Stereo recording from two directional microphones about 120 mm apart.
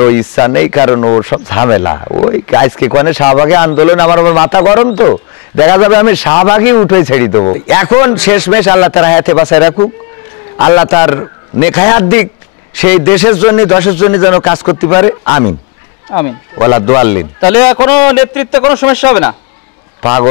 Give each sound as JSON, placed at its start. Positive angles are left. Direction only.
{"t": 0.0, "sound": "a man's voice", "side_deg": 20}